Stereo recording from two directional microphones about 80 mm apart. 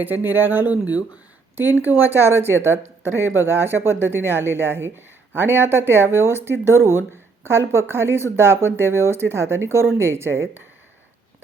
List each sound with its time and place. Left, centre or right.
0.0 s speech: right